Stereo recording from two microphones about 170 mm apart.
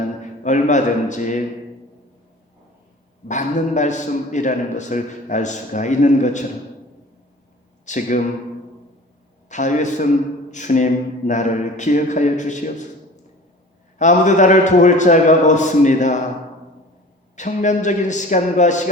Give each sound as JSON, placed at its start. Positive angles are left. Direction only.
{"t": 0.2, "sound": "a man's voice", "side_deg": 45}
{"t": 3.2, "sound": "a man's voice", "side_deg": 45}
{"t": 7.9, "sound": "a man's voice", "side_deg": 50}
{"t": 9.5, "sound": "a man's voice", "side_deg": 45}
{"t": 14.0, "sound": "a man's voice", "side_deg": 45}
{"t": 17.3, "sound": "a man's voice", "side_deg": 45}